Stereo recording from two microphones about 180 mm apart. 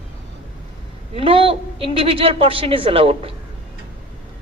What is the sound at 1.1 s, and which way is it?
A woman's voice, 30° right (ahead or behind).